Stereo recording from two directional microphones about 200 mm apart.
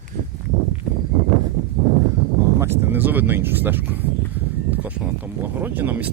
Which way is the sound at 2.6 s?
10° right (ahead or behind).